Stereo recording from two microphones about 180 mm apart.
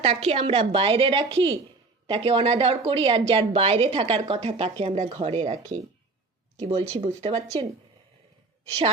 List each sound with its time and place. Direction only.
0.0 s a woman's voice: 35° right (ahead or behind)